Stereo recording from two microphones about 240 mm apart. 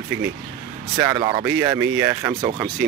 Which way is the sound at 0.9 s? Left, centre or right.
Centre.